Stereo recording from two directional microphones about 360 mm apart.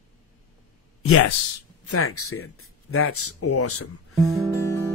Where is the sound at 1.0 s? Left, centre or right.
Left.